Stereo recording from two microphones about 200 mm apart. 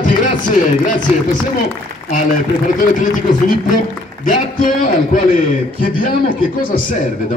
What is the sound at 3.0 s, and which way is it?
A man's voice, 40° left (ahead or behind).